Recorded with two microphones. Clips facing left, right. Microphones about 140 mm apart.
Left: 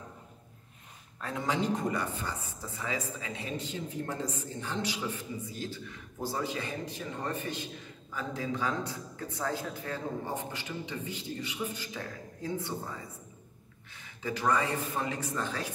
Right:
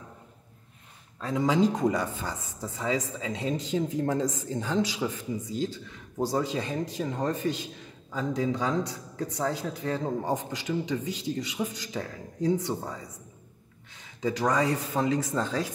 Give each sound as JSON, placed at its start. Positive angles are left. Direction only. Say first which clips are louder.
{"t": 1.3, "sound": "speech", "louder": "right 7 dB", "side_deg": -90}
{"t": 14.2, "sound": "speech", "louder": "right 4 dB", "side_deg": -90}